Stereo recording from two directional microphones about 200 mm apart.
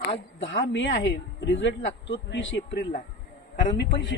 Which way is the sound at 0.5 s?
65° left (ahead or behind).